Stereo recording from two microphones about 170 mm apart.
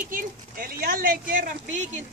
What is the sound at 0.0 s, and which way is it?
Speech, 55° right (ahead or behind).